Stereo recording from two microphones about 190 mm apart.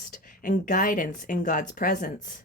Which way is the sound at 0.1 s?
45° left (ahead or behind).